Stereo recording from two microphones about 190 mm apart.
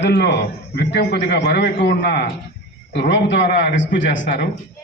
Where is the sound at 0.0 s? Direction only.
60° left (ahead or behind).